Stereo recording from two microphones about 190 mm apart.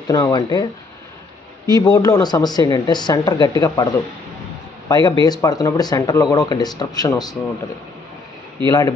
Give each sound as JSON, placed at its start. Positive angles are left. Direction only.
{"t": 0.1, "sound": "speech", "side_deg": 20}
{"t": 1.8, "sound": "a man's voice", "side_deg": 20}
{"t": 8.6, "sound": "a man's voice", "side_deg": 15}